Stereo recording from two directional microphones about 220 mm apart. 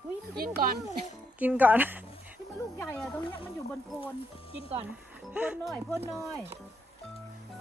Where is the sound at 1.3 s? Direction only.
5° right (ahead or behind).